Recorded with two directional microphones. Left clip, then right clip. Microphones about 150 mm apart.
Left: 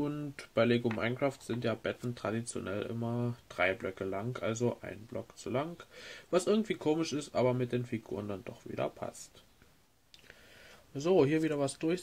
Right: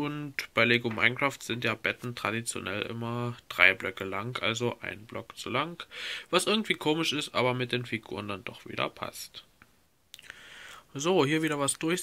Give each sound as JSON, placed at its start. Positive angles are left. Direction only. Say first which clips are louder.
{"t": 0.0, "sound": "speech", "louder": "right 4 dB", "side_deg": -10}
{"t": 11.0, "sound": "speech", "louder": "right 2 dB", "side_deg": -20}